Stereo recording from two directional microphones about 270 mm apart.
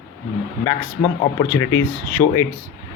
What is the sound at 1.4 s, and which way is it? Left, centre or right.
Speech, centre.